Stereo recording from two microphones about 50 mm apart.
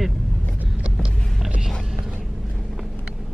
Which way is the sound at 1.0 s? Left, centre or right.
Centre.